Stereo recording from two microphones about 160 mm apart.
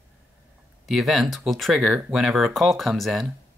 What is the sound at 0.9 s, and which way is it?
Speech, centre (ahead or behind).